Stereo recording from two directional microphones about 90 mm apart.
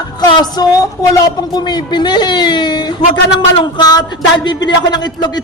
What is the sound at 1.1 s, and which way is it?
Speech, 50° left (ahead or behind).